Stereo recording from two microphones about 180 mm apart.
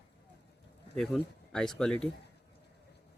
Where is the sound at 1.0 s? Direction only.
5° left (ahead or behind).